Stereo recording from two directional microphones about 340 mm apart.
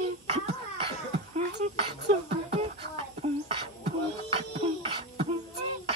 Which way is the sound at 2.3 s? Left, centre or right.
Centre.